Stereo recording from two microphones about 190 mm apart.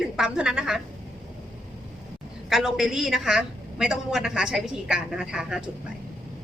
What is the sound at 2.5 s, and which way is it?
A woman's voice, centre (ahead or behind).